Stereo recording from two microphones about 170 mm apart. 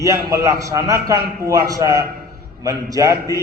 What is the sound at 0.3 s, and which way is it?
A man's voice, 20° right (ahead or behind).